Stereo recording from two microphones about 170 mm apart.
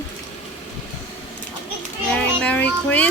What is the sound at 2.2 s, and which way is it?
Speech, 10° left (ahead or behind).